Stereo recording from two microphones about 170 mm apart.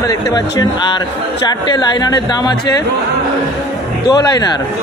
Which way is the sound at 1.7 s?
25° left (ahead or behind).